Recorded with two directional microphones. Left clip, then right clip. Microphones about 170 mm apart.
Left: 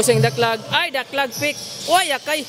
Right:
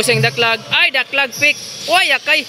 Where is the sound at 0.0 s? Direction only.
20° left (ahead or behind).